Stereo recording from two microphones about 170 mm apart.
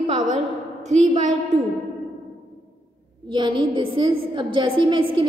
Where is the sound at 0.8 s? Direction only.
40° right (ahead or behind).